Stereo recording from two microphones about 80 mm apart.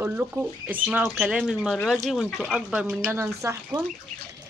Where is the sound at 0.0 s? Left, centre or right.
Centre.